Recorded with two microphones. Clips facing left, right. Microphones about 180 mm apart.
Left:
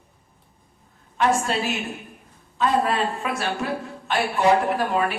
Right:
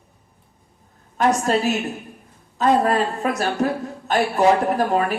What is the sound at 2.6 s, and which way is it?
A woman's voice, 45° right (ahead or behind).